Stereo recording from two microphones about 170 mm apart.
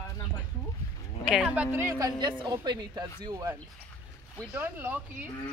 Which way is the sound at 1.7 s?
20° right (ahead or behind).